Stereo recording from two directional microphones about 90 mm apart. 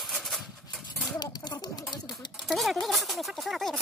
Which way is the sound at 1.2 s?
50° left (ahead or behind).